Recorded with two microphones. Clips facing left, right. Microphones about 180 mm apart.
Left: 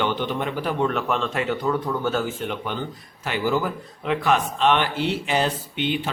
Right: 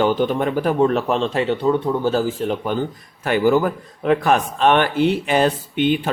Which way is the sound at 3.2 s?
50° right (ahead or behind).